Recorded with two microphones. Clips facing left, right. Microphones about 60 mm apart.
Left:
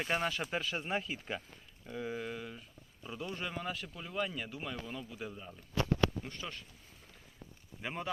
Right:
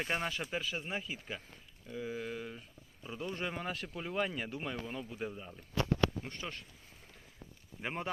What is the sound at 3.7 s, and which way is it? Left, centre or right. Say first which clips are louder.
Speech: right 2 dB; right.